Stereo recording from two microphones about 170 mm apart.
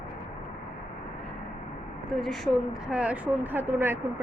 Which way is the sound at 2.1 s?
Centre (ahead or behind).